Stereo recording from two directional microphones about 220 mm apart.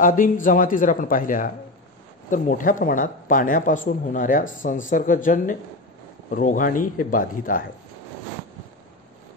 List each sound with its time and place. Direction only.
0.0 s speech: 35° left (ahead or behind)